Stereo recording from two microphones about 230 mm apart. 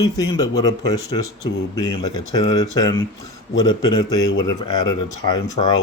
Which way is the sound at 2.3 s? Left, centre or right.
Centre.